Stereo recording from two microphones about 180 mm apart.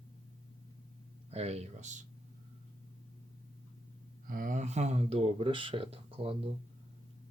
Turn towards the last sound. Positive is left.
turn(degrees=-30)  # may be behind; listen again after turning